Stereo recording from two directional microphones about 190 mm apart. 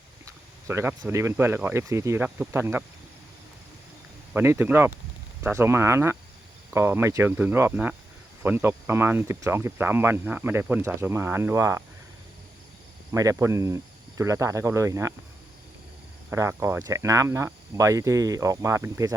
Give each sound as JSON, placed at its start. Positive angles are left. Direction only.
{"t": 0.7, "sound": "speech", "side_deg": -10}
{"t": 4.4, "sound": "speech", "side_deg": -10}
{"t": 13.1, "sound": "speech", "side_deg": -15}
{"t": 16.3, "sound": "speech", "side_deg": -15}